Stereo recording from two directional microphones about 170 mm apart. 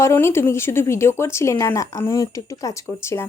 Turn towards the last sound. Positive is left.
turn(degrees=15)  # may be behind; listen again after turning